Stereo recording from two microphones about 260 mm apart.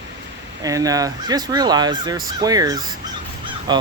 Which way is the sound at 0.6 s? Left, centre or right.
Centre.